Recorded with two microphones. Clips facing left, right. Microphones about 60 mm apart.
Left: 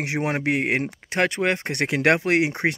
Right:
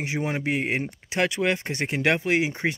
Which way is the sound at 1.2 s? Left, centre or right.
Left.